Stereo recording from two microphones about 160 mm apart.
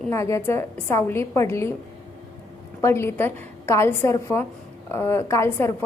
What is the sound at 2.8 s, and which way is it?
A woman's voice, 15° left (ahead or behind).